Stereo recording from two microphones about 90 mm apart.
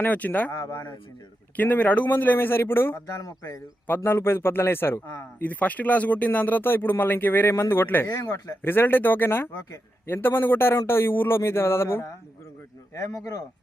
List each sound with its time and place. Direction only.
0.0 s speech: 20° left (ahead or behind)
0.5 s speech: 35° left (ahead or behind)
1.5 s speech: 20° left (ahead or behind)
3.2 s speech: 40° left (ahead or behind)
3.8 s speech: 25° left (ahead or behind)
8.1 s speech: 35° left (ahead or behind)
8.6 s speech: 25° left (ahead or behind); by 13.4 s 40° left (ahead or behind)